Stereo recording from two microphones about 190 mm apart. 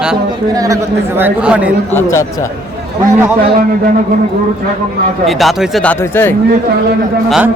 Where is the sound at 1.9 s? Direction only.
15° left (ahead or behind).